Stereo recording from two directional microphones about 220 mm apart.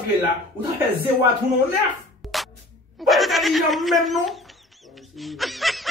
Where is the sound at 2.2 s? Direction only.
Centre (ahead or behind).